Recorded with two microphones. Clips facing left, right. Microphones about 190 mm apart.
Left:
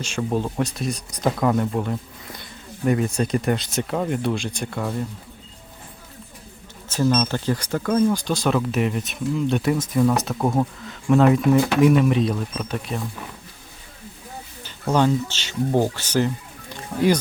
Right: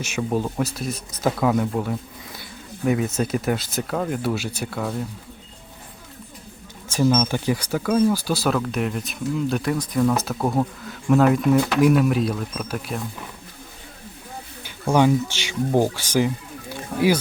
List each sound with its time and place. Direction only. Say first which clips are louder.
0.0 s speech: even; 5° right (ahead or behind)
6.9 s speech: right 1 dB; 10° right (ahead or behind)
14.6 s speech: right 2 dB; 10° right (ahead or behind)